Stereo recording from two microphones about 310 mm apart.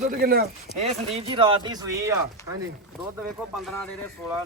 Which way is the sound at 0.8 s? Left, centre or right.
Centre.